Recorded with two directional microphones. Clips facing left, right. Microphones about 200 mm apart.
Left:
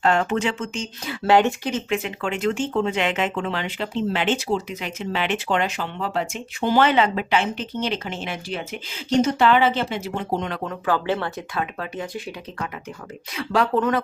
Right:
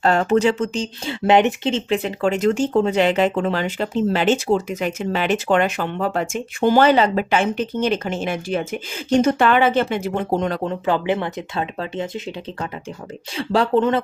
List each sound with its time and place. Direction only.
0.0 s speech: 40° right (ahead or behind)
1.2 s speech: 20° right (ahead or behind)